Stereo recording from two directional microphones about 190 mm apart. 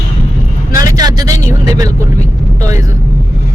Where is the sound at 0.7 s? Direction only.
20° right (ahead or behind).